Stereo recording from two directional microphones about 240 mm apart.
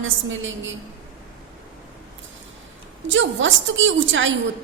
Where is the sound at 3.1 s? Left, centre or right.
Right.